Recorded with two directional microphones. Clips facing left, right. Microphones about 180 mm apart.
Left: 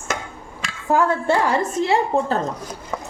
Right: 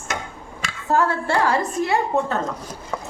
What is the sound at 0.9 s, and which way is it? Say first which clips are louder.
A woman's voice: left 2 dB; 20° left (ahead or behind).